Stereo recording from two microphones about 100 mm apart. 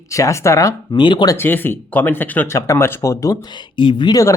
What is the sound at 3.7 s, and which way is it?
Speech, 55° left (ahead or behind).